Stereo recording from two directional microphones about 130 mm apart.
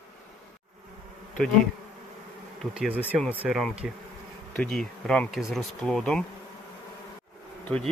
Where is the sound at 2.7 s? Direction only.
10° right (ahead or behind).